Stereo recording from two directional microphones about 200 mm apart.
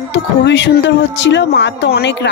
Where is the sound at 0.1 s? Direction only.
60° left (ahead or behind).